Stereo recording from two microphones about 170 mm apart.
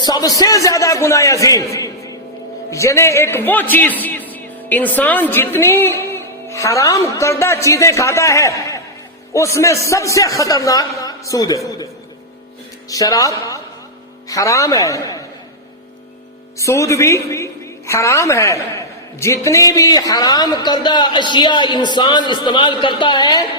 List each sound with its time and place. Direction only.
0.0 s a man's voice: 25° left (ahead or behind)
12.9 s a man's voice: 20° left (ahead or behind)
16.6 s a woman's voice: 20° left (ahead or behind)